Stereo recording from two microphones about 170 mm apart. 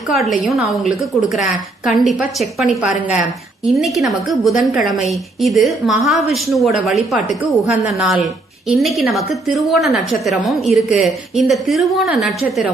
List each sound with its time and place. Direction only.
0.1 s a woman's voice: centre (ahead or behind)